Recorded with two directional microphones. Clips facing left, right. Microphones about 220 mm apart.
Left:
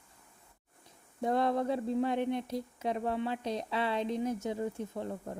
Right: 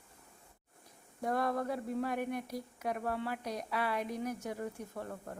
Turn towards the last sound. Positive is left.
turn(degrees=20)  # may be behind; listen again after turning